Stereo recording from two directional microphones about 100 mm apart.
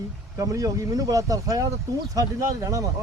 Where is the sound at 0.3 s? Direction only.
35° right (ahead or behind).